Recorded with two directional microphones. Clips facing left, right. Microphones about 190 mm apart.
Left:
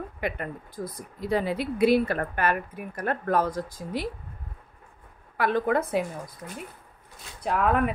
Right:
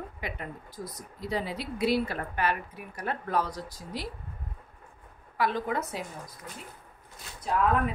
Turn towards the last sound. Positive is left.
turn(degrees=65)  # may be behind; listen again after turning